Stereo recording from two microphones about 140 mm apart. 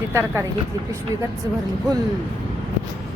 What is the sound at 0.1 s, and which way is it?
Speech, 20° right (ahead or behind).